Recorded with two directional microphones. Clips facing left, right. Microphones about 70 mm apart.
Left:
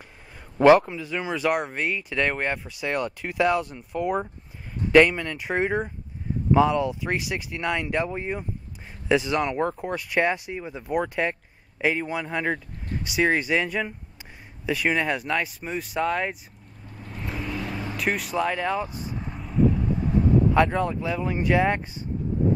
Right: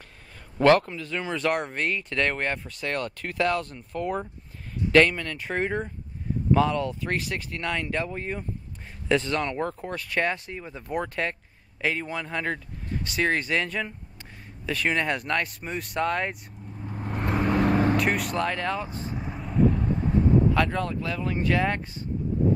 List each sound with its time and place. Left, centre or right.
0.6 s speech: centre
16.8 s vehicle: right
17.9 s speech: centre
19.1 s vehicle: centre
20.5 s speech: centre